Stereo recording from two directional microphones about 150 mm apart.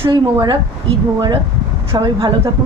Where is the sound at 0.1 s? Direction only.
30° right (ahead or behind).